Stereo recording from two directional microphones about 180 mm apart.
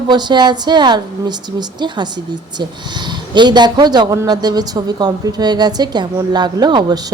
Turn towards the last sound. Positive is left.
turn(degrees=-25)  # may be behind; listen again after turning